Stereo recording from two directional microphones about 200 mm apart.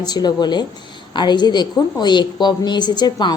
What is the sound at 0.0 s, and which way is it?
A woman's voice, 20° left (ahead or behind).